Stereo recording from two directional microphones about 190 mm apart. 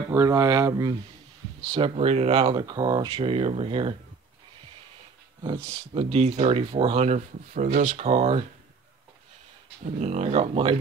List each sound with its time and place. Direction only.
0.1 s speech: 15° right (ahead or behind)
1.7 s speech: 30° right (ahead or behind)
5.9 s speech: 30° right (ahead or behind)
9.9 s speech: 35° right (ahead or behind)